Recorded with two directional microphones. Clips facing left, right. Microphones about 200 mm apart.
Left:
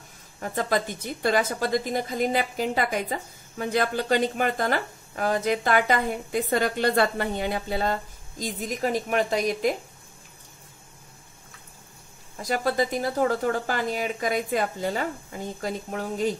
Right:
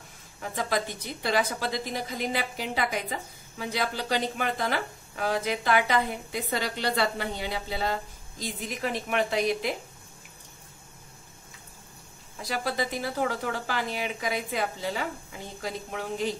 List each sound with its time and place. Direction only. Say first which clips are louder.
0.4 s a woman's voice: left 3 dB; 45° left (ahead or behind)
12.4 s a woman's voice: left 5 dB; 45° left (ahead or behind)